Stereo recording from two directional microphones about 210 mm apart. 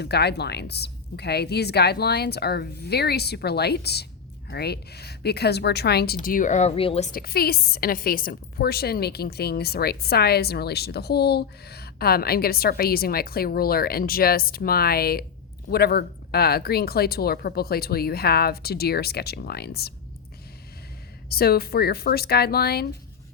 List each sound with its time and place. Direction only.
0.0 s a woman's voice: 50° left (ahead or behind)
6.2 s speech: 40° left (ahead or behind)
7.1 s a woman's voice: 45° left (ahead or behind)
21.2 s a woman's voice: 45° left (ahead or behind)